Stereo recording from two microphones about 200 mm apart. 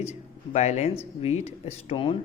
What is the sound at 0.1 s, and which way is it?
A man's voice, 35° left (ahead or behind).